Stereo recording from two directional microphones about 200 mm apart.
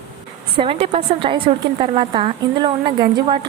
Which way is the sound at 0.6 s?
30° right (ahead or behind).